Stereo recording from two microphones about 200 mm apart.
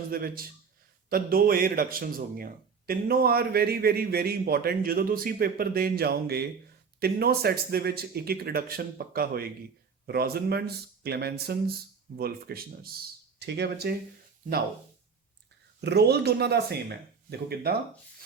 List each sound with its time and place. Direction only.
0.1 s a man's voice: 45° right (ahead or behind)
15.8 s a man's voice: 55° right (ahead or behind)